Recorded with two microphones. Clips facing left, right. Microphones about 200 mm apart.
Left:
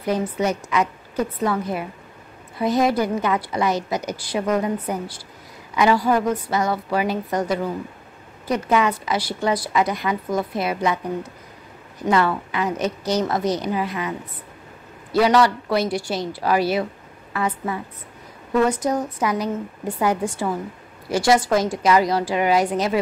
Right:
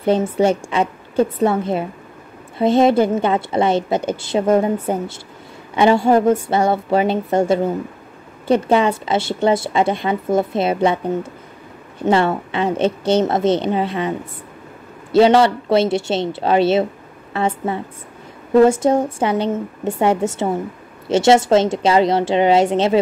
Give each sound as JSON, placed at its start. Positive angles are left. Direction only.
{"t": 0.0, "sound": "a woman's voice", "side_deg": -30}